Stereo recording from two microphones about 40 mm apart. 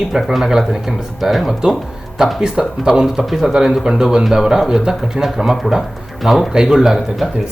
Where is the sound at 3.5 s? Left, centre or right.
Centre.